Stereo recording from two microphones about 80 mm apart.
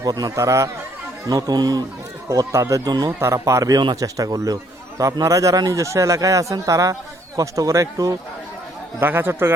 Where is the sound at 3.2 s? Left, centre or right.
Right.